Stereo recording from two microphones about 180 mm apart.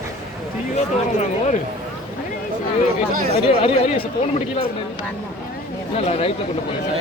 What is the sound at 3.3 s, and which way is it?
Speech, 35° left (ahead or behind).